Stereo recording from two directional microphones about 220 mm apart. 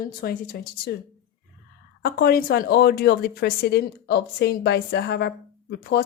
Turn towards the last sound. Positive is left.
turn(degrees=45)  # may be behind; listen again after turning